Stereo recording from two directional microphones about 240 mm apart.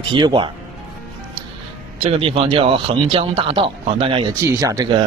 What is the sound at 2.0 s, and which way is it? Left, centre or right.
Speech, right.